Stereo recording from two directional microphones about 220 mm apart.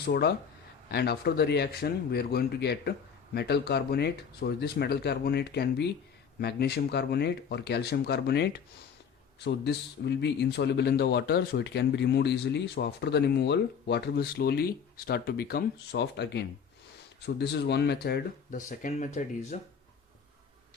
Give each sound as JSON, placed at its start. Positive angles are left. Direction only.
{"t": 0.0, "sound": "a man's voice", "side_deg": 45}